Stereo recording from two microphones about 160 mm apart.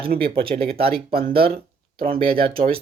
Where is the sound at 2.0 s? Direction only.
65° right (ahead or behind).